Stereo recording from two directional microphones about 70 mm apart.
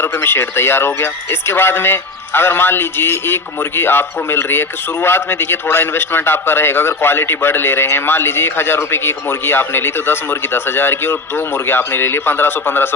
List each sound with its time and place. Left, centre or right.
0.0 s speech: left